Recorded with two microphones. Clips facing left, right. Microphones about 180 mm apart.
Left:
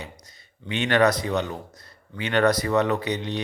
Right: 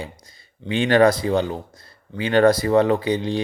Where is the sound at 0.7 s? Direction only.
30° right (ahead or behind).